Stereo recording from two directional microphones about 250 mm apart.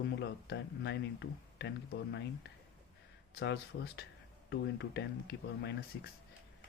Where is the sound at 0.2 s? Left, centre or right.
Left.